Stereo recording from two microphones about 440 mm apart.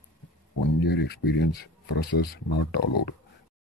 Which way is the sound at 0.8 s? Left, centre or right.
Left.